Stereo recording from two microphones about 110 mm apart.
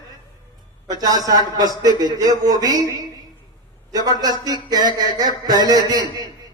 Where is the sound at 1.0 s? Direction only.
35° right (ahead or behind).